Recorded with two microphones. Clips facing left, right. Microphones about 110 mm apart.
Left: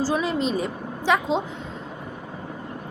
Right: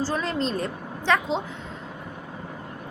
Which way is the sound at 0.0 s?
10° left (ahead or behind).